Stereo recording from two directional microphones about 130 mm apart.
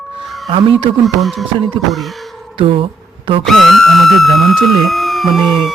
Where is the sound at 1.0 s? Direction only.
Centre (ahead or behind).